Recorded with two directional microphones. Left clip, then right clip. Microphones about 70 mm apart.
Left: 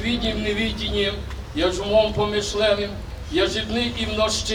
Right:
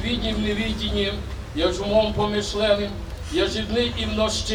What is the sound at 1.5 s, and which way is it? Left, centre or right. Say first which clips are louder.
A man's voice: left 1 dB; centre.